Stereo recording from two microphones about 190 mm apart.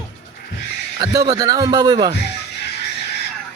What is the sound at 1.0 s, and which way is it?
A man's voice, 20° right (ahead or behind).